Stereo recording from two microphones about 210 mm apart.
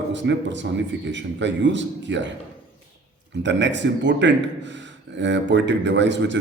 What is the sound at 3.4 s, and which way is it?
A man's voice, 60° right (ahead or behind).